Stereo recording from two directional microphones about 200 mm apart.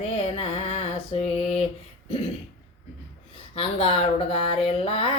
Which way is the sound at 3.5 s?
30° left (ahead or behind).